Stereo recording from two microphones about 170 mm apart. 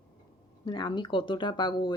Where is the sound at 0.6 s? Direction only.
25° left (ahead or behind).